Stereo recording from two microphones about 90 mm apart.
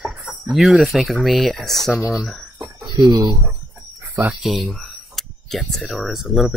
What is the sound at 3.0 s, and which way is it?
Speech, 50° right (ahead or behind).